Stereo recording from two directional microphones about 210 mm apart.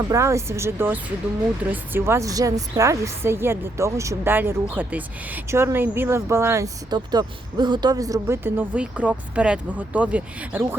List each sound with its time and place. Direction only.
0.1 s a woman's voice: 15° right (ahead or behind)